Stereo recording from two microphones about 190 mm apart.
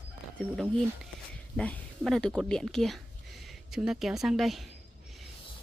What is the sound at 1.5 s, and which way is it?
Speech, 5° left (ahead or behind).